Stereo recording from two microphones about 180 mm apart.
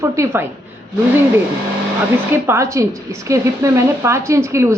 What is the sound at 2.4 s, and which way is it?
A woman's voice, 15° right (ahead or behind).